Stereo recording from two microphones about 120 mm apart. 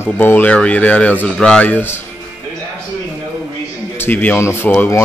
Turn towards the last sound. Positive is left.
turn(degrees=15)  # may be behind; listen again after turning